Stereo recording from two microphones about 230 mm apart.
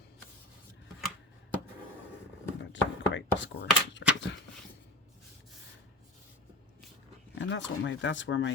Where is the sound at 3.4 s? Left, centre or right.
Left.